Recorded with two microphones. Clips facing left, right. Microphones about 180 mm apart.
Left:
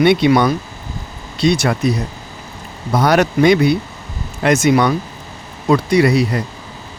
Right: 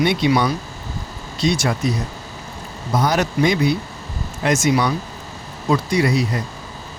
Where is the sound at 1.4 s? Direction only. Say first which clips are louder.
Left 4 dB; 65° left (ahead or behind).